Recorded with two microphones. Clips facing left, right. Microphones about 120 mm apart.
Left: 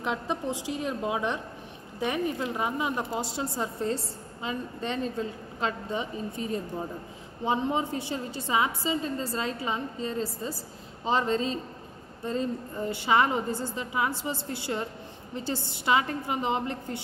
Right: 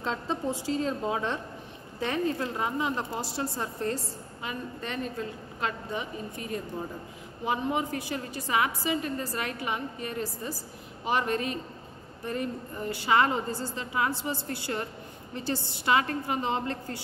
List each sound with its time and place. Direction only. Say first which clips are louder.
0.0 s a woman's voice: even; 15° left (ahead or behind)